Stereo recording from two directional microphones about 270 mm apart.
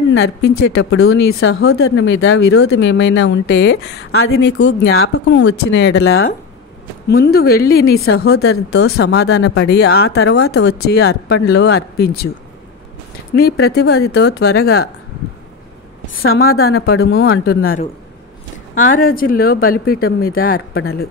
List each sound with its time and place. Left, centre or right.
0.1 s speech: left
7.1 s speech: left
8.4 s speech: left
10.5 s speech: left
10.9 s speech: left
13.3 s speech: left
16.3 s speech: left